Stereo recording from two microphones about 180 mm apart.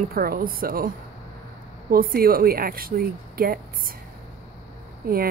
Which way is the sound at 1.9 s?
55° right (ahead or behind).